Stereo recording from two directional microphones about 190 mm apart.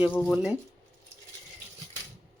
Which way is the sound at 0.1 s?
10° left (ahead or behind).